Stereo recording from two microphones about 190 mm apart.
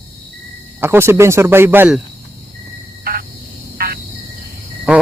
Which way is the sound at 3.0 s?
55° right (ahead or behind).